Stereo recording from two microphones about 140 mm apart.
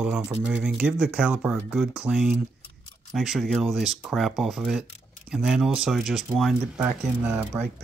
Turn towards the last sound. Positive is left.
turn(degrees=-10)  # may be behind; listen again after turning